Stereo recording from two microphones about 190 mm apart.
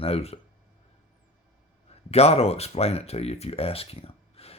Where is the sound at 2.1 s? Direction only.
35° left (ahead or behind).